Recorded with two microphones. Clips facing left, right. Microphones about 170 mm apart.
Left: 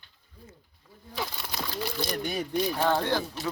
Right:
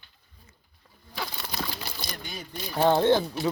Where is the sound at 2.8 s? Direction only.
25° right (ahead or behind).